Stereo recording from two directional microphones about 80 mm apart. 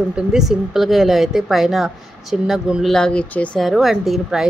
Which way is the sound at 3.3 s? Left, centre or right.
Centre.